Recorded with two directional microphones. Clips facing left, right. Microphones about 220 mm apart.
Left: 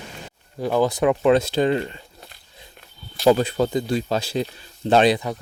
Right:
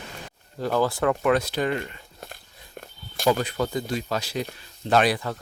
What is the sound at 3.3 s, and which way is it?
Speech, 30° left (ahead or behind).